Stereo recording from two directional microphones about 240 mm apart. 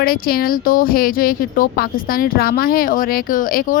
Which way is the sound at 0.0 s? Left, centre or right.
Left.